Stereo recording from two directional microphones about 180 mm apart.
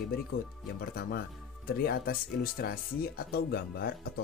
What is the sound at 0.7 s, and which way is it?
Speech, 55° left (ahead or behind).